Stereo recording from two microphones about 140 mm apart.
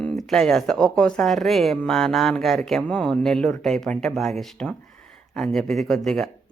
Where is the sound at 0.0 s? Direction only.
Centre (ahead or behind).